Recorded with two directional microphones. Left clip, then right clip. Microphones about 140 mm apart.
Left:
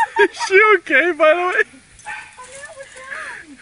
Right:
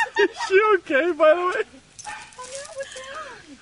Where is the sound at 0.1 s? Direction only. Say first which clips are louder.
Left 5 dB; centre (ahead or behind).